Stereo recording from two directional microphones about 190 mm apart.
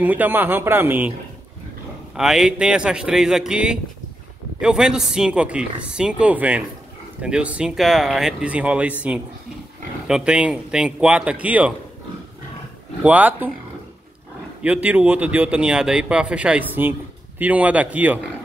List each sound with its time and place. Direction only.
0.0 s speech: 10° right (ahead or behind)
2.1 s speech: centre (ahead or behind)
13.0 s speech: 10° right (ahead or behind)
14.6 s speech: 5° right (ahead or behind)